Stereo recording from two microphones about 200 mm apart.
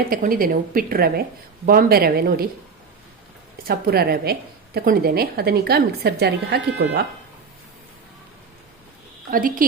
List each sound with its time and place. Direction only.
0.1 s a woman's voice: 45° right (ahead or behind)
3.7 s a woman's voice: 50° right (ahead or behind)
9.3 s a woman's voice: 45° right (ahead or behind)